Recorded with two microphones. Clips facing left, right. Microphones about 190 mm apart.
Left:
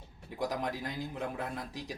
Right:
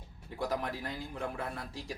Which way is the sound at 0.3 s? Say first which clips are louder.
Even; 15° left (ahead or behind).